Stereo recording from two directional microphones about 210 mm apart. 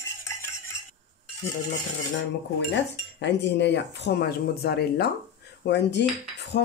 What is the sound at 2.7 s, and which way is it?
Cutlery, 55° left (ahead or behind).